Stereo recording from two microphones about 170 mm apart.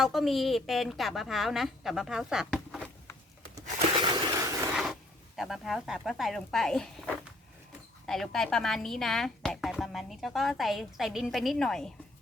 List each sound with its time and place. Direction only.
0.0 s a woman's voice: centre (ahead or behind)
3.9 s a sound: 25° right (ahead or behind)
5.4 s a woman's voice: centre (ahead or behind)